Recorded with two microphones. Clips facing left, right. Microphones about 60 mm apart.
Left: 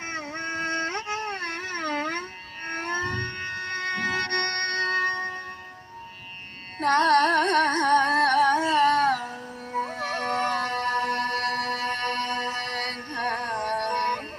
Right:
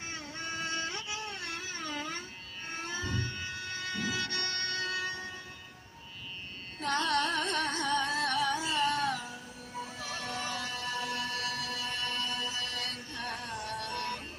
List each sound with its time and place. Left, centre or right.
0.1 s music: left
6.7 s music: left